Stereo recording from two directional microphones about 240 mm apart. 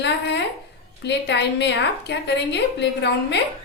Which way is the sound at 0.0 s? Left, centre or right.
Left.